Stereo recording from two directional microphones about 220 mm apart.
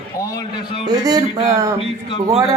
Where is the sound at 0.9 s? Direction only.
15° right (ahead or behind).